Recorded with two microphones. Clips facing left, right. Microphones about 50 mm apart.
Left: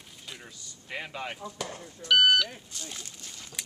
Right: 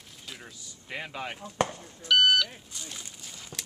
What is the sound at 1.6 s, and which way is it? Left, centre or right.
Speech, right.